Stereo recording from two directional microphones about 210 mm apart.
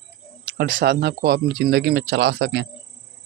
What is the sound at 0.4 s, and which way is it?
Speech, 50° right (ahead or behind).